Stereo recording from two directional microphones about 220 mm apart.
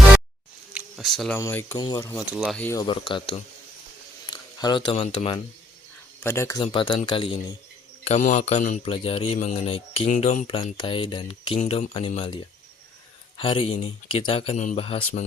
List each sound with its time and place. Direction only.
0.7 s camera: centre (ahead or behind)
1.4 s speech: 10° left (ahead or behind)
2.1 s speech: centre (ahead or behind)
2.8 s a man's voice: 25° left (ahead or behind)
6.2 s a man's voice: 10° left (ahead or behind)